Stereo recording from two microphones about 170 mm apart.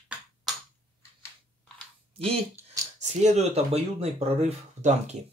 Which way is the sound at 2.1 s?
35° right (ahead or behind).